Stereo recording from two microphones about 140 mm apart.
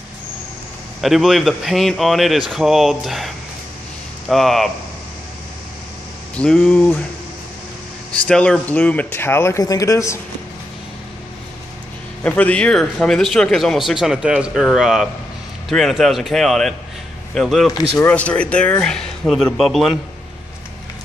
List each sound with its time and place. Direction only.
1.0 s a man's voice: centre (ahead or behind)
4.3 s a man's voice: centre (ahead or behind)
6.3 s speech: 5° left (ahead or behind)
8.1 s speech: 5° left (ahead or behind)
12.2 s a man's voice: 10° left (ahead or behind)
17.9 s a man's voice: 10° left (ahead or behind)